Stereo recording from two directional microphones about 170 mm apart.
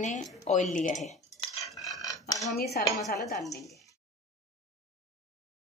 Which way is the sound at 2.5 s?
70° left (ahead or behind).